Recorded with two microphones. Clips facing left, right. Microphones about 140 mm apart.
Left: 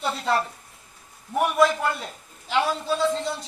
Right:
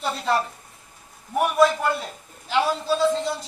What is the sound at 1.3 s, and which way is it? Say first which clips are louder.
Speech: right 1 dB; 5° right (ahead or behind).